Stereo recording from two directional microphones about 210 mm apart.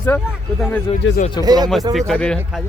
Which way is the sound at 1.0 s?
65° left (ahead or behind).